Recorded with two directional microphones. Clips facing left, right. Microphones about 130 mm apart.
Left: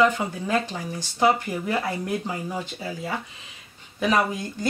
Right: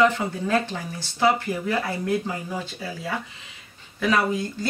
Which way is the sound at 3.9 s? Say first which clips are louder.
Even; 20° left (ahead or behind).